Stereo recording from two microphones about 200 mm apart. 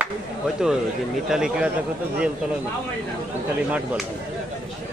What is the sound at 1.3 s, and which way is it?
Speech, 5° right (ahead or behind).